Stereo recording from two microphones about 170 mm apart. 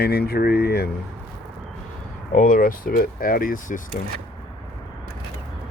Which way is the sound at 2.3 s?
50° left (ahead or behind).